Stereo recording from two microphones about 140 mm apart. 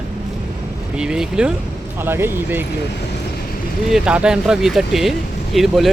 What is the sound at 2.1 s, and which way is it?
Speech, 15° right (ahead or behind).